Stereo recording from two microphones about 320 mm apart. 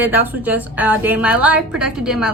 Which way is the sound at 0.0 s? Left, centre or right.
Centre.